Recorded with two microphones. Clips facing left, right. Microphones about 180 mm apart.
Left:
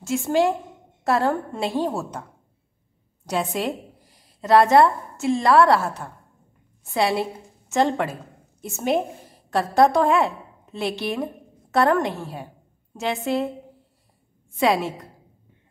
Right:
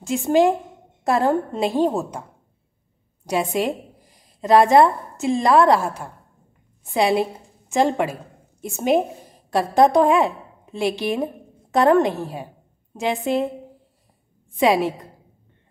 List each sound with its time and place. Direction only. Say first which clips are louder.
0.0 s a woman's voice: right 3 dB; 15° right (ahead or behind)
3.3 s a woman's voice: right 3 dB; 15° right (ahead or behind)
14.6 s a woman's voice: right 3 dB; 15° right (ahead or behind)